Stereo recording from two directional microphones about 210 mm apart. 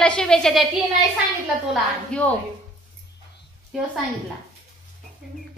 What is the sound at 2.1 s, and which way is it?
Speech, 5° left (ahead or behind).